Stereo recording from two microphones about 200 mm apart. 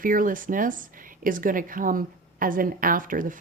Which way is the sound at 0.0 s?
45° right (ahead or behind).